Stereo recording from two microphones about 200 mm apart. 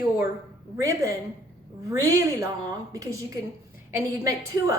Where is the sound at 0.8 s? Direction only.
15° right (ahead or behind).